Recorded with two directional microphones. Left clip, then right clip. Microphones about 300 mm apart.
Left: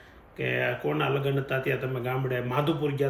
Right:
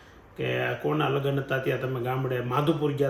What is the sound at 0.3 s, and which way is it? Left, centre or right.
Speech, centre.